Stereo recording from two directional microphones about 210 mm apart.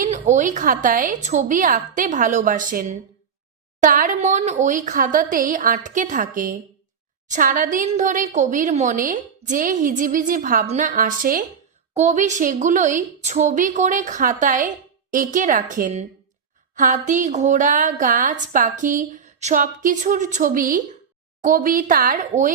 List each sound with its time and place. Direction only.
0.0 s a woman's voice: 35° right (ahead or behind)